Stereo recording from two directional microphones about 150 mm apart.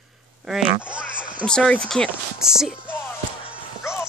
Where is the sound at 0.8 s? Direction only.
5° right (ahead or behind).